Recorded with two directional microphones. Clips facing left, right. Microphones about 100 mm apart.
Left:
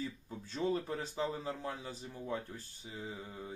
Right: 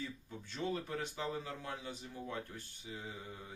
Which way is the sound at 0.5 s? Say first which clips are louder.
Left 4 dB; 35° left (ahead or behind).